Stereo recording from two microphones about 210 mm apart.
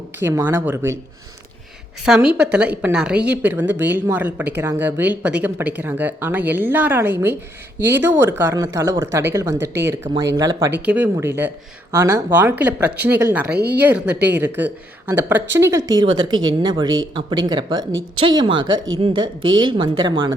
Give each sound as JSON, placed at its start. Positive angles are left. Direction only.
{"t": 0.2, "sound": "speech", "side_deg": -10}
{"t": 2.0, "sound": "speech", "side_deg": -5}
{"t": 13.6, "sound": "speech", "side_deg": -50}
{"t": 13.8, "sound": "speech", "side_deg": -5}